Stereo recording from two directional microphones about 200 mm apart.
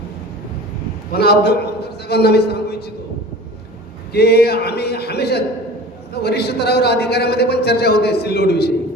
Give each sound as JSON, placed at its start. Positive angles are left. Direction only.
{"t": 1.1, "sound": "a man's voice", "side_deg": 55}
{"t": 4.1, "sound": "a man's voice", "side_deg": 55}